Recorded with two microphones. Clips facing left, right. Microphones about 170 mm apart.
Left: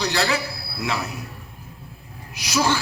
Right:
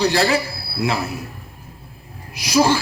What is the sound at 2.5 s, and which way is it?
Speech, 30° right (ahead or behind).